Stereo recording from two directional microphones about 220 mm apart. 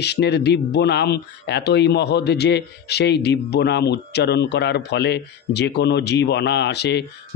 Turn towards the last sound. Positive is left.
turn(degrees=50)  # may be behind; listen again after turning